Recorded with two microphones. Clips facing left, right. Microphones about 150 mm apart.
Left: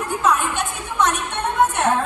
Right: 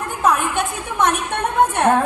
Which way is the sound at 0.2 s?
50° right (ahead or behind).